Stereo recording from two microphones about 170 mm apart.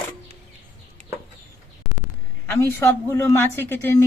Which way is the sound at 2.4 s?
15° left (ahead or behind).